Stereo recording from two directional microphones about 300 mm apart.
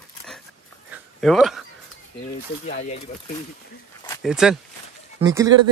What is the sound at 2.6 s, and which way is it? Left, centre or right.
Speech, left.